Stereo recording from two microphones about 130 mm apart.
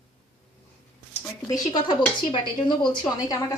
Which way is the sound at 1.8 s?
35° left (ahead or behind).